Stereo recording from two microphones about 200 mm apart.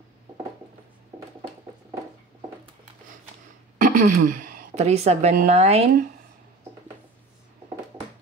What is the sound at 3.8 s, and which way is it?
A woman's voice, 40° right (ahead or behind).